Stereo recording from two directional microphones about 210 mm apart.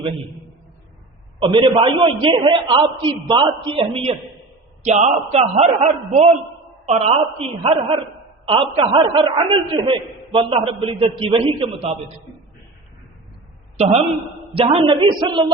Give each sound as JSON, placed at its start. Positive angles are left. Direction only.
{"t": 1.4, "sound": "a man's voice", "side_deg": -25}
{"t": 14.5, "sound": "a man's voice", "side_deg": -25}